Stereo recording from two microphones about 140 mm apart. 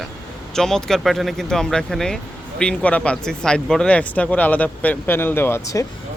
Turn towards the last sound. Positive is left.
turn(degrees=20)  # may be behind; listen again after turning